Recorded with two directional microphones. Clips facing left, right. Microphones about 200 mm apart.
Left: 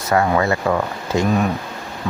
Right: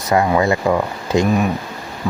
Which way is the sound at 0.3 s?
15° right (ahead or behind).